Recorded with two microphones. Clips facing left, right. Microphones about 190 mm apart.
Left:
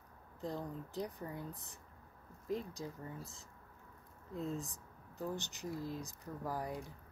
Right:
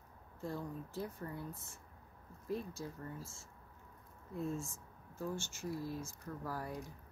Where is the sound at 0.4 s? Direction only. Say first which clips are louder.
Left 1 dB; 15° left (ahead or behind).